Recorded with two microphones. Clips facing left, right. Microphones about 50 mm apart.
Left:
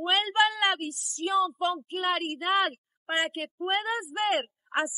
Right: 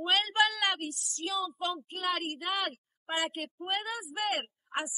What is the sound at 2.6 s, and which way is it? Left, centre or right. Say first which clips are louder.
A woman's voice: left 6 dB; left.